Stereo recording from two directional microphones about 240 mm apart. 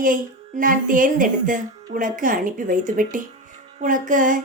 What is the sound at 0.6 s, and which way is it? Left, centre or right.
Speech, right.